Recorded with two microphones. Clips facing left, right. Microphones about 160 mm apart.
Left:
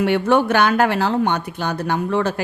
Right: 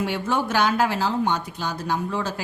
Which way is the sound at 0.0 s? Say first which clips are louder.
Left 8 dB; 65° left (ahead or behind).